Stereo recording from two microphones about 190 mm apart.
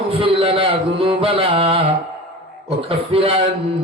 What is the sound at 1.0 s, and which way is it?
Music, 30° right (ahead or behind).